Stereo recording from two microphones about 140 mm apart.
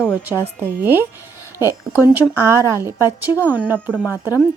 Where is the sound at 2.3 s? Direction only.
20° right (ahead or behind).